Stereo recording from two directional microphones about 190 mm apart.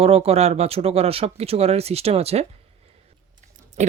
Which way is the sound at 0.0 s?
30° right (ahead or behind).